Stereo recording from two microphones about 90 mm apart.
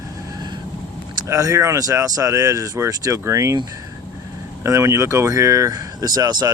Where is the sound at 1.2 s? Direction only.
35° right (ahead or behind).